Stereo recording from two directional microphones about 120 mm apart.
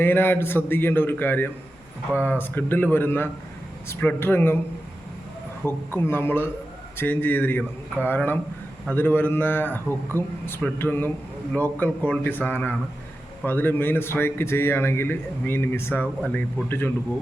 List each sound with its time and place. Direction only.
0.0 s a man's voice: 15° left (ahead or behind)
5.6 s a man's voice: 20° left (ahead or behind)